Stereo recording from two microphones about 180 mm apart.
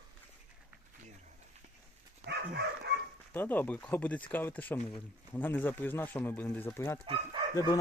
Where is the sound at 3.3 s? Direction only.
10° left (ahead or behind).